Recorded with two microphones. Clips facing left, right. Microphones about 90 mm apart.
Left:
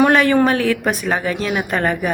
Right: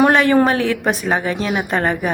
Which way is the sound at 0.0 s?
30° right (ahead or behind).